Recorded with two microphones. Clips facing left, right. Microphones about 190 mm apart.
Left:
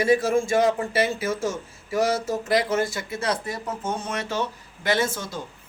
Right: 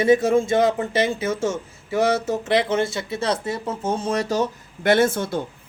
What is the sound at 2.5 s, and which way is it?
Speech, 25° right (ahead or behind).